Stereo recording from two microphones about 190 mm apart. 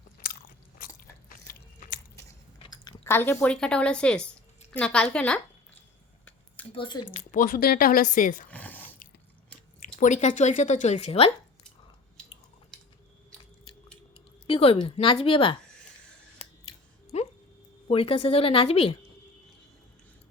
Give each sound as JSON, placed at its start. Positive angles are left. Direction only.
{"t": 0.8, "sound": "biting", "side_deg": 50}
{"t": 2.6, "sound": "a woman's voice", "side_deg": 15}
{"t": 6.7, "sound": "a woman's voice", "side_deg": 25}
{"t": 7.1, "sound": "speech", "side_deg": 45}
{"t": 8.4, "sound": "a sound", "side_deg": 10}
{"t": 9.8, "sound": "speech", "side_deg": 40}
{"t": 12.7, "sound": "chewing", "side_deg": 5}
{"t": 14.4, "sound": "a woman's voice", "side_deg": 30}
{"t": 16.4, "sound": "scissors", "side_deg": 30}
{"t": 17.8, "sound": "a woman's voice", "side_deg": 30}